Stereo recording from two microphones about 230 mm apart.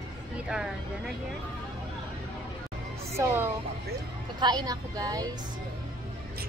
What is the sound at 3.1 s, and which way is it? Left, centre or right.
A woman's voice, centre.